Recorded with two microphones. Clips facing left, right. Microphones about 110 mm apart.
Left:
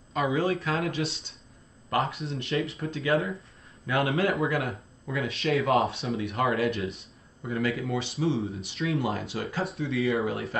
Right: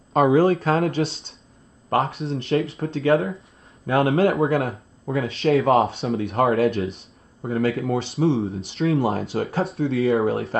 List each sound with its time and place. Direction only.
0.1 s speech: 45° right (ahead or behind)